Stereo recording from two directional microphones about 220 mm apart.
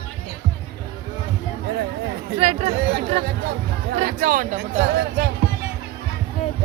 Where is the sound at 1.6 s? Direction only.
45° right (ahead or behind).